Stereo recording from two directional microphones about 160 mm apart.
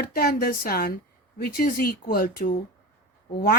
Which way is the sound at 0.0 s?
70° left (ahead or behind).